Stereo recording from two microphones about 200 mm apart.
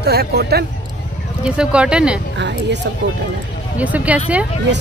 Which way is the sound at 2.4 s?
60° right (ahead or behind).